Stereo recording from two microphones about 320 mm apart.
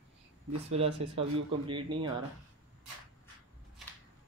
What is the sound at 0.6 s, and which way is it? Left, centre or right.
Speech, centre.